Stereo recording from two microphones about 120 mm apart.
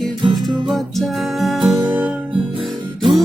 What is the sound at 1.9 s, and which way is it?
Music, 10° right (ahead or behind).